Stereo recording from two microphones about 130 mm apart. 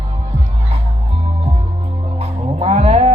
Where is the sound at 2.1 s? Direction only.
50° right (ahead or behind).